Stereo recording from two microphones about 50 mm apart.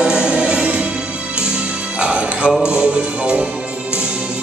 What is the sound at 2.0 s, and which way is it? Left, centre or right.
Music, right.